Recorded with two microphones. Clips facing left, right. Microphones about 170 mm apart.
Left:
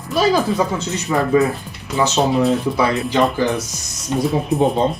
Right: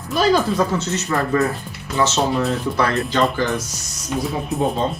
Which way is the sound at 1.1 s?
10° left (ahead or behind).